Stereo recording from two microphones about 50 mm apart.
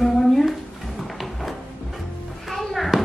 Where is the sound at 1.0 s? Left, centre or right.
Centre.